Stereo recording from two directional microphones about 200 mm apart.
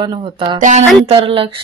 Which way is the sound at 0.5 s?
35° right (ahead or behind).